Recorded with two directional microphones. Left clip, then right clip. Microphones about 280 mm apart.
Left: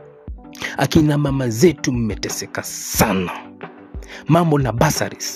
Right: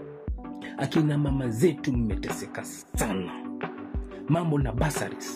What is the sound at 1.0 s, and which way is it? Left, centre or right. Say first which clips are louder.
Speech: left 9 dB; left.